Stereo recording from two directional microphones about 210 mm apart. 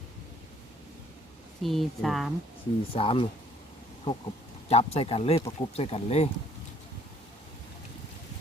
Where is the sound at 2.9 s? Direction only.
25° left (ahead or behind).